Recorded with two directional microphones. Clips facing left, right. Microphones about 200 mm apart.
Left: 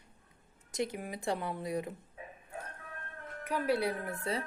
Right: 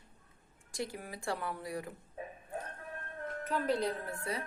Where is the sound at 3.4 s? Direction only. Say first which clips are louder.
Left 2 dB; 10° left (ahead or behind).